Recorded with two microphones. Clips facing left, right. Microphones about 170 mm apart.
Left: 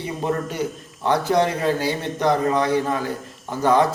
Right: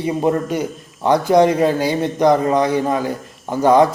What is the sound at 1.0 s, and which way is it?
Speech, 15° right (ahead or behind).